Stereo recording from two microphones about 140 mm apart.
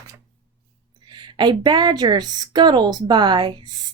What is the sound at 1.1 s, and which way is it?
A woman's voice, 30° right (ahead or behind).